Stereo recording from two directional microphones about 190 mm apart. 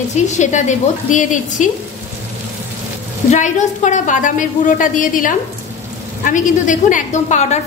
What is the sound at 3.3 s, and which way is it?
A woman's voice, 40° left (ahead or behind).